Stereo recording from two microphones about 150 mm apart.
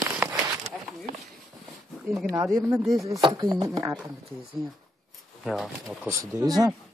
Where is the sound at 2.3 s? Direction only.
20° right (ahead or behind).